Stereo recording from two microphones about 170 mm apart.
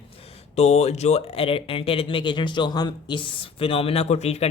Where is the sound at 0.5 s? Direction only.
40° left (ahead or behind).